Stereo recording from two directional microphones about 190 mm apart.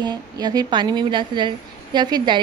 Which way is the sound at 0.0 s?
20° right (ahead or behind).